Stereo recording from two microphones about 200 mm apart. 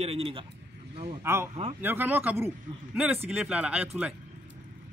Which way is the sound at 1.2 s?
10° right (ahead or behind).